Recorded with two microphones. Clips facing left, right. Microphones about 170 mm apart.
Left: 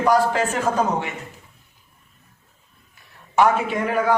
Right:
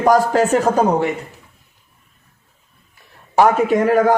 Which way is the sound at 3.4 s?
40° right (ahead or behind).